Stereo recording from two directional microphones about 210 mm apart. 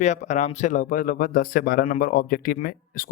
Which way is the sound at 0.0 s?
35° left (ahead or behind).